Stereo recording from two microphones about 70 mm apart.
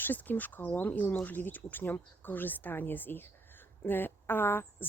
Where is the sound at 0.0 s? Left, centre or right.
Left.